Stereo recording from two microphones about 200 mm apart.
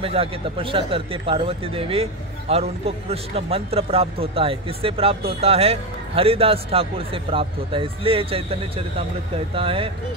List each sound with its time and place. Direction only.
0.0 s a man's voice: 30° right (ahead or behind)